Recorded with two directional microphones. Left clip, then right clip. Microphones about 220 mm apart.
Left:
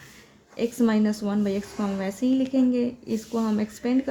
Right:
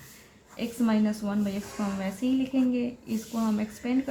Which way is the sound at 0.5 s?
40° left (ahead or behind).